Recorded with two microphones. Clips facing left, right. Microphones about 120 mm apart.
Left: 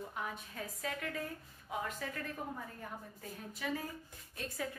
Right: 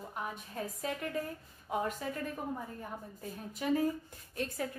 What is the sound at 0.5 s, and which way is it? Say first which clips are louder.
Speech: right 4 dB; 30° right (ahead or behind).